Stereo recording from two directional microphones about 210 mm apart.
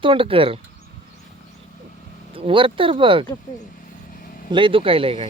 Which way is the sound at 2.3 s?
25° right (ahead or behind).